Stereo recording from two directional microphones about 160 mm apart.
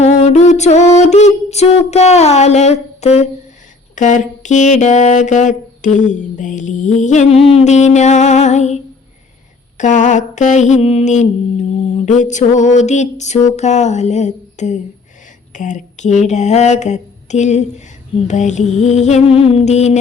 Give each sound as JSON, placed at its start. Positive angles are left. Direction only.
{"t": 0.0, "sound": "music", "side_deg": 45}
{"t": 3.9, "sound": "mantra", "side_deg": 50}